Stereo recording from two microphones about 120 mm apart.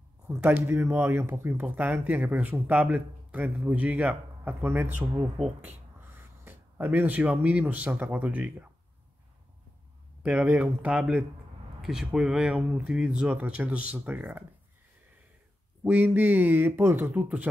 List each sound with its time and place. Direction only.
0.3 s a man's voice: 20° right (ahead or behind)
5.4 s speech: centre (ahead or behind)
6.4 s a man's voice: 20° right (ahead or behind)
10.2 s a man's voice: 15° right (ahead or behind)
15.8 s a man's voice: 15° right (ahead or behind)